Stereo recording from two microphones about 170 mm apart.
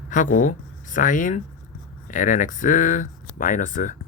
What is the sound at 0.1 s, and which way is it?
Speech, 50° left (ahead or behind).